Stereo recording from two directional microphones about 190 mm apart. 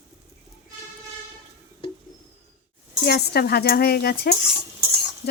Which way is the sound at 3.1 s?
55° left (ahead or behind).